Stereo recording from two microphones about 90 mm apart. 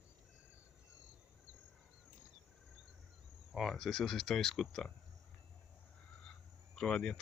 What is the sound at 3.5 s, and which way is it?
Speech, centre (ahead or behind).